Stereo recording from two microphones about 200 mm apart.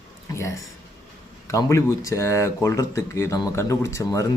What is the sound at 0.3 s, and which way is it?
Speech, 15° left (ahead or behind).